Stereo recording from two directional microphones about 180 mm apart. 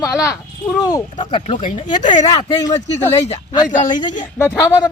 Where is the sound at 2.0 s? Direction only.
45° left (ahead or behind).